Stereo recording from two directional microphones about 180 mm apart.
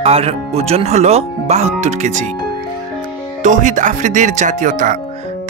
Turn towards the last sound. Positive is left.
turn(degrees=-45)  # may be behind; listen again after turning